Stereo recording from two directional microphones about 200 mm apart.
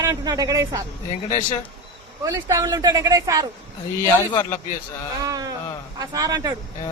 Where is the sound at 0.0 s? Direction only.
20° right (ahead or behind).